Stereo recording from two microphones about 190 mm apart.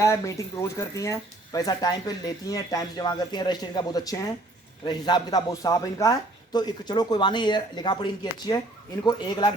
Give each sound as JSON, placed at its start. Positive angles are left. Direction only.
{"t": 0.0, "sound": "speech", "side_deg": 15}